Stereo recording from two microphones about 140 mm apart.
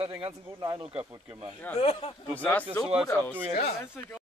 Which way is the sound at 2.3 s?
10° left (ahead or behind).